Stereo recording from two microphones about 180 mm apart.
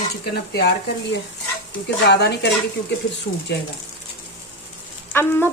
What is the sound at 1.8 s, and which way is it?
Speech, 70° left (ahead or behind).